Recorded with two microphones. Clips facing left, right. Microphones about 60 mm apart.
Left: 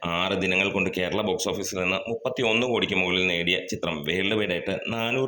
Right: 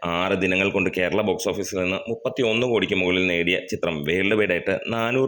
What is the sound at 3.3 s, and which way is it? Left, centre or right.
Speech, right.